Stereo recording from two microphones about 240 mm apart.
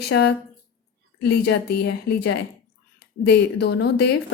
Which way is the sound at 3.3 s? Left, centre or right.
Left.